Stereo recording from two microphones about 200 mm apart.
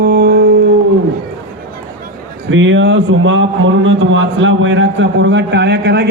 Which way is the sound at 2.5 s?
70° right (ahead or behind).